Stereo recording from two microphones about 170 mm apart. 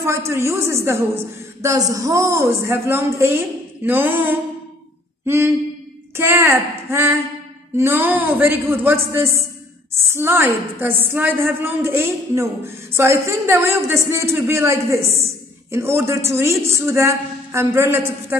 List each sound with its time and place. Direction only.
0.0 s speech: 15° right (ahead or behind)
5.2 s a sound: 15° right (ahead or behind)
6.1 s speech: 15° right (ahead or behind)